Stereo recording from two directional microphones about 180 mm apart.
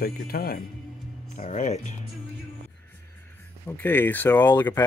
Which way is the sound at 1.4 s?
40° left (ahead or behind).